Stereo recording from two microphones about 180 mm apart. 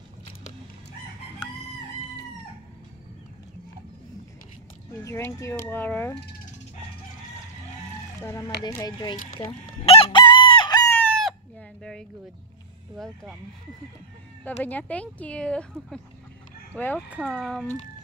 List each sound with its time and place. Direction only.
5.0 s speech: 15° left (ahead or behind)
8.2 s speech: 15° left (ahead or behind)
9.8 s chicken: 30° left (ahead or behind)
11.0 s chicken: 5° left (ahead or behind)
11.8 s a sound: 5° left (ahead or behind)
14.4 s speech: 10° left (ahead or behind)